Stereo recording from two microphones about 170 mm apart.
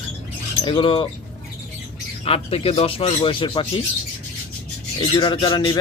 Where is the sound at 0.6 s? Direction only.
30° left (ahead or behind).